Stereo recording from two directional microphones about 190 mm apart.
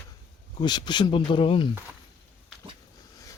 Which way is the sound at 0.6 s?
25° left (ahead or behind).